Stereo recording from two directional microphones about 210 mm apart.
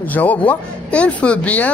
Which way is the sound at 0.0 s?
5° left (ahead or behind).